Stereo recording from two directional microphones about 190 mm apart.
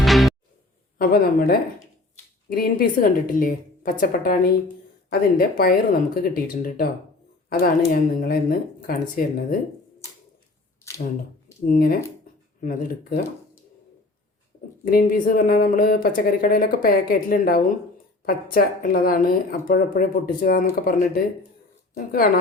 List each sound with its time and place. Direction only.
0.0 s music: centre (ahead or behind)
0.9 s speech: 50° left (ahead or behind)
10.8 s a sound: 10° left (ahead or behind)
11.6 s speech: 45° left (ahead or behind)
14.8 s speech: 50° left (ahead or behind)
21.9 s speech: 50° left (ahead or behind)